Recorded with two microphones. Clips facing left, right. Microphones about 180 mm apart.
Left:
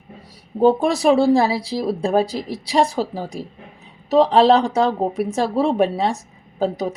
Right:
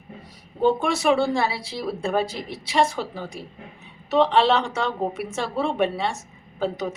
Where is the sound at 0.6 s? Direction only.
35° left (ahead or behind).